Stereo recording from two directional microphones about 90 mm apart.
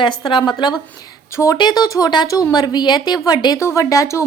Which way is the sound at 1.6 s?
50° left (ahead or behind).